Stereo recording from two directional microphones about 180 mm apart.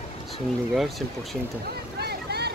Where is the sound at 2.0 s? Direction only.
65° right (ahead or behind).